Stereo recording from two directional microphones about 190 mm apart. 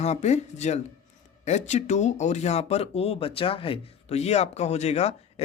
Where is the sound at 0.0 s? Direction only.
35° left (ahead or behind).